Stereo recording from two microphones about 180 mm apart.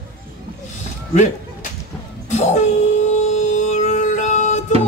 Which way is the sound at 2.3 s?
40° left (ahead or behind).